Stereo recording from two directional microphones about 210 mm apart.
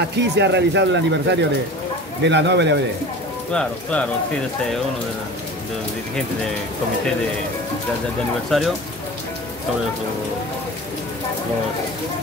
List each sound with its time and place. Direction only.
0.1 s speech: 55° right (ahead or behind)
3.5 s speech: 5° left (ahead or behind)
8.5 s speech: centre (ahead or behind)